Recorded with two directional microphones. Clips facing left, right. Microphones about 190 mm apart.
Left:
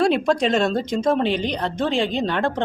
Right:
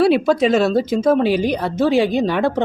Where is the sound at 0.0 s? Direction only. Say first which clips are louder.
Right 4 dB; 5° right (ahead or behind).